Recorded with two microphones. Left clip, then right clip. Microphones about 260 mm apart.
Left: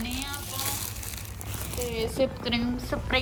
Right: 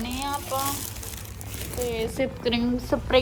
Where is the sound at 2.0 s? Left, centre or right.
Right.